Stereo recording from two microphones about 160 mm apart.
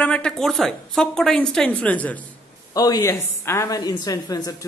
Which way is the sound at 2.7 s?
25° left (ahead or behind).